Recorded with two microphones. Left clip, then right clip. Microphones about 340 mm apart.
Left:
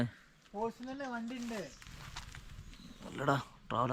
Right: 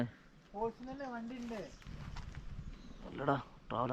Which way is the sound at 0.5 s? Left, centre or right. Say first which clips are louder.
Left 1 dB; centre.